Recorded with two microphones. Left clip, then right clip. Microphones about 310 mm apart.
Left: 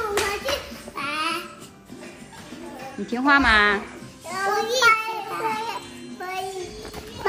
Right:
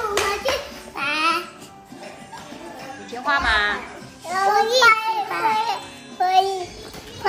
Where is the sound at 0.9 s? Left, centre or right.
Centre.